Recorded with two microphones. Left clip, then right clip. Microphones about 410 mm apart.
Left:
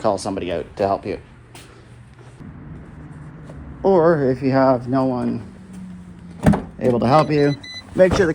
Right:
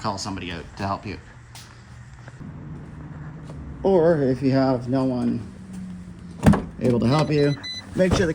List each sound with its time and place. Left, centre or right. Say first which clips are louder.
0.0 s speech: left 8 dB; centre
3.9 s speech: left 3 dB; left
4.4 s speech: left 8 dB; centre
6.4 s speech: left 2 dB; centre